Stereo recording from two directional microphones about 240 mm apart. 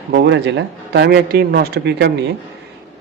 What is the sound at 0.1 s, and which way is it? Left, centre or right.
Speech, right.